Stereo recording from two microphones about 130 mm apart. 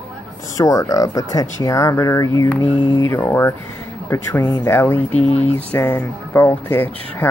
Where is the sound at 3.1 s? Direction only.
15° left (ahead or behind).